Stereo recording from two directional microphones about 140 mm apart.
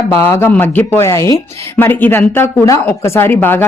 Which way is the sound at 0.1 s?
20° left (ahead or behind).